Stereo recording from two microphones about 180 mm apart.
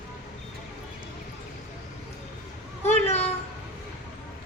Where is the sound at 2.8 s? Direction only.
35° left (ahead or behind).